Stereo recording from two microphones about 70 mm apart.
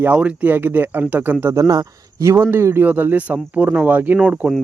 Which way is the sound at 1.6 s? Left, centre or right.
Right.